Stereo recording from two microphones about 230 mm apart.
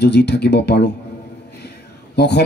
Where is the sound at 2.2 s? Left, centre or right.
Left.